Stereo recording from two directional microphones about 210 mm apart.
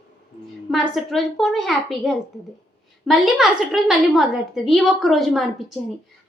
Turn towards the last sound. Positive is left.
turn(degrees=0)  # may be behind; listen again after turning